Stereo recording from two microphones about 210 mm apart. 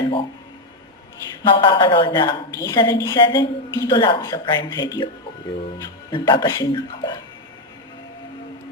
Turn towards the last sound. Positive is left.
turn(degrees=20)  # may be behind; listen again after turning